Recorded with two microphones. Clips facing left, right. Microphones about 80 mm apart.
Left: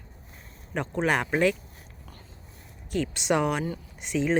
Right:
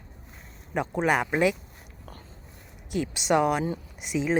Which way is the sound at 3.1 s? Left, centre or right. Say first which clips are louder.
Right 3 dB; centre.